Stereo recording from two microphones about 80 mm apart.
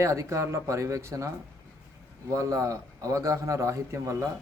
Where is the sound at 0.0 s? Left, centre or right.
Right.